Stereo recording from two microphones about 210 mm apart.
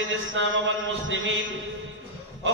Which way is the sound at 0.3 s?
65° right (ahead or behind).